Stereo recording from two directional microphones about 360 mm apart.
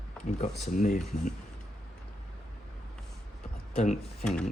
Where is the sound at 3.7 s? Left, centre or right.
Centre.